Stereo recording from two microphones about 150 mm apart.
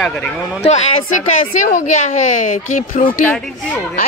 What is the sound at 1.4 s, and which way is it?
Speech, 60° left (ahead or behind).